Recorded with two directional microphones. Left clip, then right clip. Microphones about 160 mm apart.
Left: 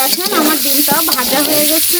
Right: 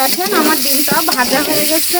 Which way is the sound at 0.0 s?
15° left (ahead or behind).